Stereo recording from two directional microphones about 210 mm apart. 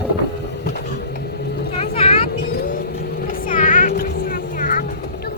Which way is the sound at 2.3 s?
45° left (ahead or behind).